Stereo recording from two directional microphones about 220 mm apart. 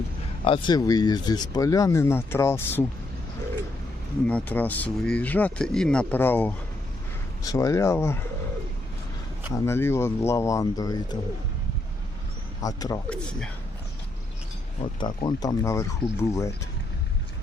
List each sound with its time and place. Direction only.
0.4 s speech: 20° left (ahead or behind)
4.3 s speech: 5° left (ahead or behind)
9.5 s speech: 10° left (ahead or behind)
12.6 s speech: 15° left (ahead or behind)
13.1 s a man's voice: 5° left (ahead or behind)
14.9 s speech: 20° left (ahead or behind)